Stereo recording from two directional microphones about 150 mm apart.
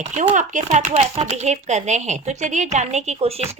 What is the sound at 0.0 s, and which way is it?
A woman's voice, 55° right (ahead or behind).